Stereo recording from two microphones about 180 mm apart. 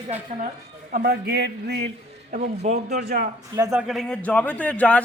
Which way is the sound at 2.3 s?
40° right (ahead or behind).